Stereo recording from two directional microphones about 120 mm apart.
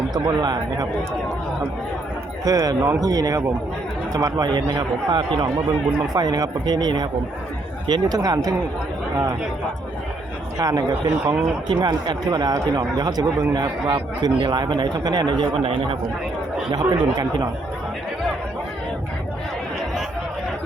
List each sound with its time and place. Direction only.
0.1 s speech: 35° right (ahead or behind)
2.4 s speech: 30° right (ahead or behind)
10.6 s speech: 30° right (ahead or behind)
15.5 s speech: 55° right (ahead or behind)
16.7 s speech: 35° right (ahead or behind)